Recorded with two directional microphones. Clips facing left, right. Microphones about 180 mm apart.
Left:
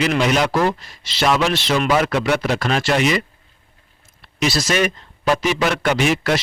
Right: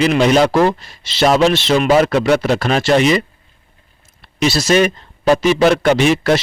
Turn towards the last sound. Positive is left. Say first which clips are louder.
# right 5 dB
turn(degrees=-30)  # may be behind; listen again after turning